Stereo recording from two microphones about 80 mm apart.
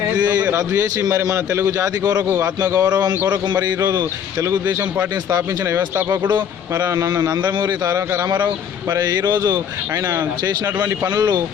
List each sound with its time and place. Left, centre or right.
0.5 s a man's voice: right
3.8 s a man's voice: right
4.6 s speech: right
5.3 s a man's voice: right
9.9 s a man's voice: right
10.4 s a man's voice: right